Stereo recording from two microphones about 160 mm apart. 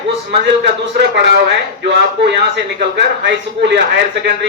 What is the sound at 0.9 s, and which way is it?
A man's voice, 90° right.